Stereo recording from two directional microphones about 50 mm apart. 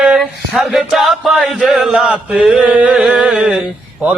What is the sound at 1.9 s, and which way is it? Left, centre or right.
Speech, right.